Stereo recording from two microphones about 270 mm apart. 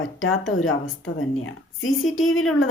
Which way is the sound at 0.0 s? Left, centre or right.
Left.